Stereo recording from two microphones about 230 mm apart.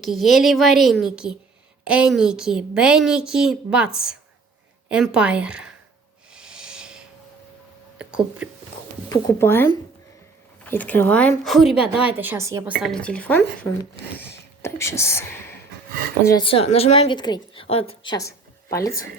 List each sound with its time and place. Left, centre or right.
0.0 s a woman's voice: centre
6.3 s a sound: centre
7.9 s speech: centre
9.0 s a woman's voice: centre
12.8 s a woman's voice: centre